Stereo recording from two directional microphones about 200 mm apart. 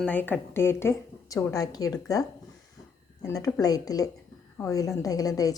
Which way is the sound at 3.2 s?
15° left (ahead or behind).